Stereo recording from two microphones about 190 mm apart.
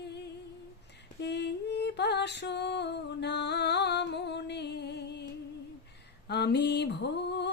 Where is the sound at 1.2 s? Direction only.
65° left (ahead or behind).